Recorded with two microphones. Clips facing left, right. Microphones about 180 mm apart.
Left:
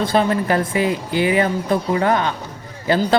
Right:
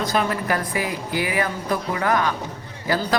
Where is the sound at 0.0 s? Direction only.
30° left (ahead or behind).